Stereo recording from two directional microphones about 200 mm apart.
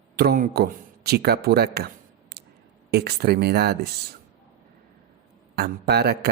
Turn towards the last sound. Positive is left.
turn(degrees=-55)  # may be behind; listen again after turning